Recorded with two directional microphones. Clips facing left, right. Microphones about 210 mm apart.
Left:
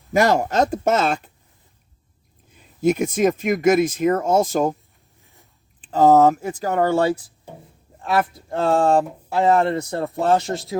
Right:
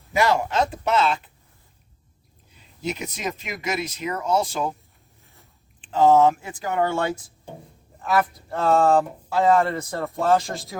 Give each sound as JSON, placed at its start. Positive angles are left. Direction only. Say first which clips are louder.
{"t": 0.1, "sound": "speech", "louder": "left 4 dB", "side_deg": 45}
{"t": 2.6, "sound": "speech", "louder": "left 11 dB", "side_deg": 50}
{"t": 5.8, "sound": "speech", "louder": "left 3 dB", "side_deg": 40}